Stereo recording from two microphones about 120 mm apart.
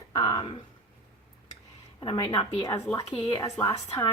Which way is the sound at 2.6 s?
30° left (ahead or behind).